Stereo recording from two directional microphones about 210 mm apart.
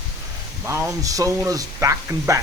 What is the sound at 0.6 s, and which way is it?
Speech, 10° right (ahead or behind).